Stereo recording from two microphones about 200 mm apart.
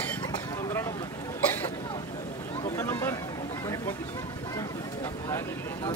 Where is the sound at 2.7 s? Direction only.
10° left (ahead or behind).